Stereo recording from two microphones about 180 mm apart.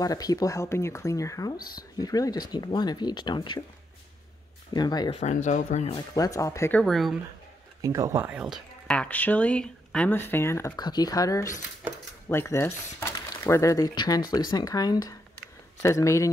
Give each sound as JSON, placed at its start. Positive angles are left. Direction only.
{"t": 0.0, "sound": "speech", "side_deg": 20}
{"t": 1.6, "sound": "speech", "side_deg": 55}
{"t": 2.0, "sound": "speech", "side_deg": 20}
{"t": 4.7, "sound": "speech", "side_deg": 20}
{"t": 5.2, "sound": "speech", "side_deg": 45}
{"t": 5.9, "sound": "speech", "side_deg": 20}
{"t": 7.8, "sound": "speech", "side_deg": -15}
{"t": 8.5, "sound": "speech", "side_deg": 5}